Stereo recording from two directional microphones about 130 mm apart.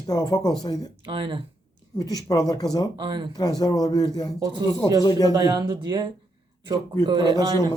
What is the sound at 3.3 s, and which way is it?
Speech, 30° left (ahead or behind).